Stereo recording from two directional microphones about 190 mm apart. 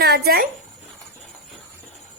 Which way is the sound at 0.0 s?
55° right (ahead or behind).